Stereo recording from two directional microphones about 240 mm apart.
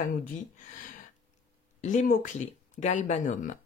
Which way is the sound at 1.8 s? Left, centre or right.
Left.